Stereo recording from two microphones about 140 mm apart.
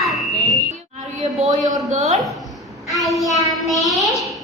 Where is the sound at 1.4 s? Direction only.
55° right (ahead or behind).